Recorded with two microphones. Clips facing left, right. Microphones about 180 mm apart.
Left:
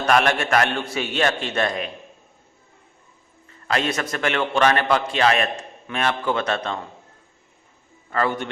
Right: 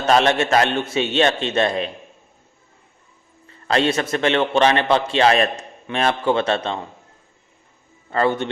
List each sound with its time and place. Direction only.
0.0 s a man's voice: 25° right (ahead or behind)
3.7 s a man's voice: 30° right (ahead or behind)
8.1 s a man's voice: 25° right (ahead or behind)